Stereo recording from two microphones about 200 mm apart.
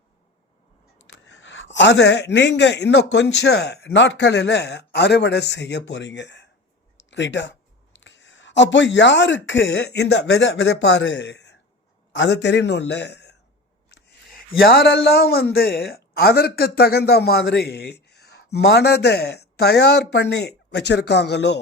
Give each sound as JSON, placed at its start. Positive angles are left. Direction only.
{"t": 1.3, "sound": "a man's voice", "side_deg": 65}
{"t": 6.9, "sound": "a sound", "side_deg": 65}
{"t": 7.9, "sound": "a man's voice", "side_deg": 65}